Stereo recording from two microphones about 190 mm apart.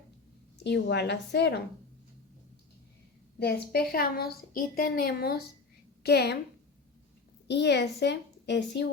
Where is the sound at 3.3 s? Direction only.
55° left (ahead or behind).